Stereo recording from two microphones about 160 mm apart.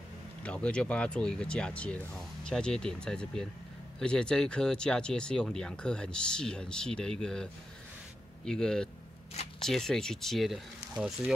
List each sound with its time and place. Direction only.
0.4 s speech: 5° left (ahead or behind)
8.5 s speech: 5° left (ahead or behind)